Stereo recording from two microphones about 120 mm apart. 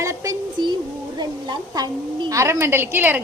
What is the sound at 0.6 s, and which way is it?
Child singing, 35° right (ahead or behind).